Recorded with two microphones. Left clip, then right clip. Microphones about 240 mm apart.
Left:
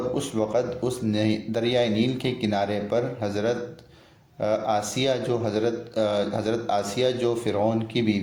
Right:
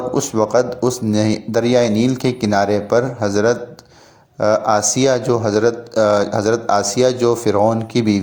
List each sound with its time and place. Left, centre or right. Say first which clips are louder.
0.1 s speech: right 13 dB; right